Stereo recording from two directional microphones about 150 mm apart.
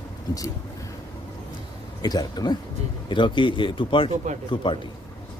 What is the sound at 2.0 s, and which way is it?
Speech, 25° left (ahead or behind).